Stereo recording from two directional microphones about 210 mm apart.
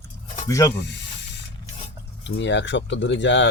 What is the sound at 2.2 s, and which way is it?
Speech, 60° left (ahead or behind).